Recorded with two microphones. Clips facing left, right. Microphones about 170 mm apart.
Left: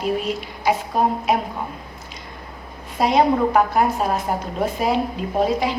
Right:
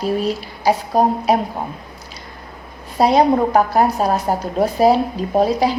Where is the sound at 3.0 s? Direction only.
35° right (ahead or behind).